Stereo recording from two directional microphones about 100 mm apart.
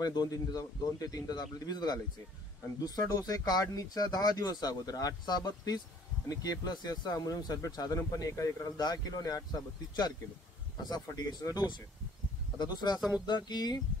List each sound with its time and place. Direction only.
0.0 s speech: 40° left (ahead or behind)